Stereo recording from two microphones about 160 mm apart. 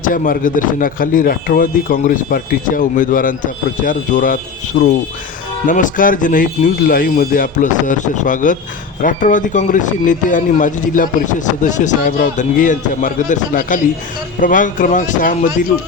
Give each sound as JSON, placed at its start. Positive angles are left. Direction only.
{"t": 0.0, "sound": "speech", "side_deg": 60}